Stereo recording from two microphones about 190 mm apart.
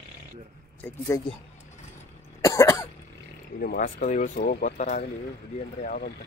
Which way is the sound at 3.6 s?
50° left (ahead or behind).